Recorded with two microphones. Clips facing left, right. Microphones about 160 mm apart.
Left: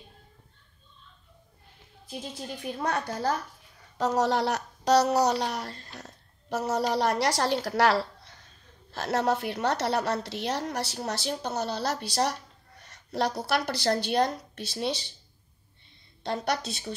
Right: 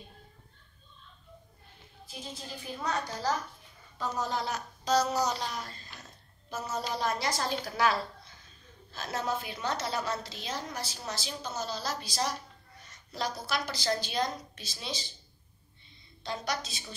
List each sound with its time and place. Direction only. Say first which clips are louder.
2.6 s a child's voice: left 4 dB; 60° left (ahead or behind)
4.0 s a woman's voice: left 8 dB; 80° left
16.2 s a child's voice: left 6 dB; 65° left (ahead or behind)